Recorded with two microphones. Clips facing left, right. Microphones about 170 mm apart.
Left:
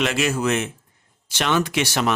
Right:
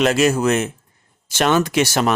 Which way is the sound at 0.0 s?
40° right (ahead or behind).